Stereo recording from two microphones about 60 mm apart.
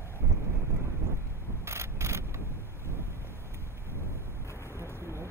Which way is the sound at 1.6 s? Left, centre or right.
Right.